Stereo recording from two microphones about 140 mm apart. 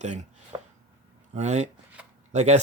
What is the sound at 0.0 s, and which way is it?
Speech, 60° right (ahead or behind).